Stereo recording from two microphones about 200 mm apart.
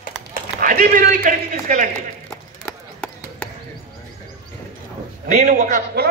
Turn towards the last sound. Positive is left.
turn(degrees=-45)  # may be behind; listen again after turning